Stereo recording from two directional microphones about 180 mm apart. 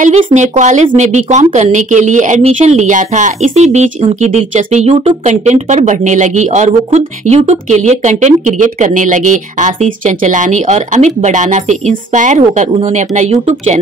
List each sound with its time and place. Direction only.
0.3 s speech: 40° right (ahead or behind)